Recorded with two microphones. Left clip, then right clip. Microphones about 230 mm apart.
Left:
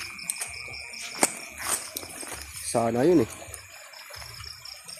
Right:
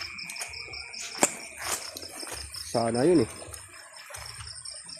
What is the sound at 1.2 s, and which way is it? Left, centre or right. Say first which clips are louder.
Cricket: even; centre.